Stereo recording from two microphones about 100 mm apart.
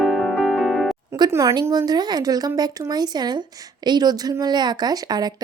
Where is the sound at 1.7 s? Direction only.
40° right (ahead or behind).